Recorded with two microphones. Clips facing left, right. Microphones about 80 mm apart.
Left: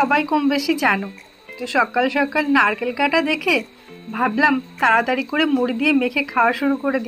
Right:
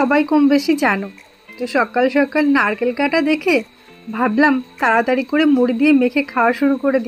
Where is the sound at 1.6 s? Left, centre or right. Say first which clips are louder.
Right 2 dB; centre.